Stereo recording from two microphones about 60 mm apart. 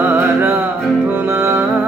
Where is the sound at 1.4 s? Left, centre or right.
Right.